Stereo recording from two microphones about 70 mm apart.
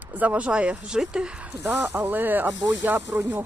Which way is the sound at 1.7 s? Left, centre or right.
Right.